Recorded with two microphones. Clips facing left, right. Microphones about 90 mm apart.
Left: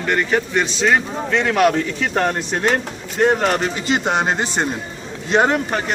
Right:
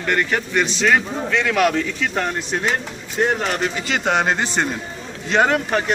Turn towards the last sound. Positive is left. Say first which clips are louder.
# left 1 dB
turn(degrees=20)  # may be behind; listen again after turning